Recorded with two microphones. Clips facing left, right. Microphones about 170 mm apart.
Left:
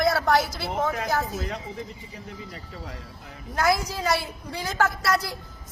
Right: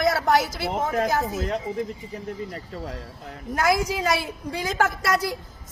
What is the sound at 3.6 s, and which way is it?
A woman's voice, 15° right (ahead or behind).